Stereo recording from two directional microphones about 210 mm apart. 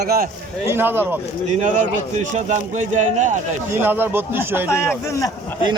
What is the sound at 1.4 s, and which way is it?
Speech, 35° right (ahead or behind).